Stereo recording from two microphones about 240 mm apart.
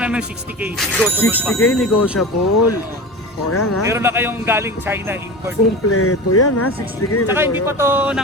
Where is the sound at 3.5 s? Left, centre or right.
Left.